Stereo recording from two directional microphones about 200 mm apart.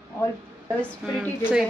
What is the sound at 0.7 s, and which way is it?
Speech, 5° left (ahead or behind).